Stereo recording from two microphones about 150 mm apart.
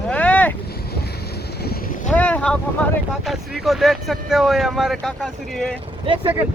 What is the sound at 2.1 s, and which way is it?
Boat, 10° left (ahead or behind).